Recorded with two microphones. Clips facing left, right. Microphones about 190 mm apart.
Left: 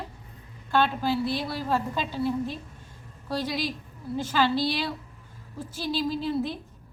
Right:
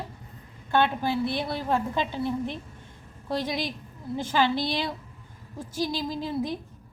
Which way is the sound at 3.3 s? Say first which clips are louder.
Even; 20° right (ahead or behind).